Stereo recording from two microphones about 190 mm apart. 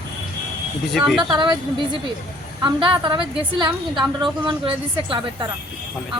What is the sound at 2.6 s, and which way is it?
A woman's voice, 25° right (ahead or behind).